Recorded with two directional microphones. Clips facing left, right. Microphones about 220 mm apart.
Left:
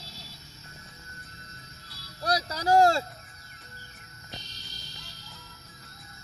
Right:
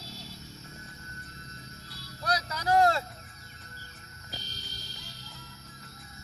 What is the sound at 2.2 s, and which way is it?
Vehicle, 35° left (ahead or behind).